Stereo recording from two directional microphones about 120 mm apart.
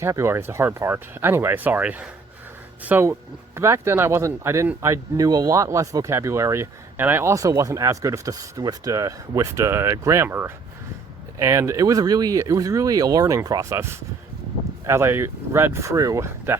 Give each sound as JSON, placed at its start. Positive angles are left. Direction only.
{"t": 0.0, "sound": "speech", "side_deg": -25}
{"t": 14.8, "sound": "speech", "side_deg": -20}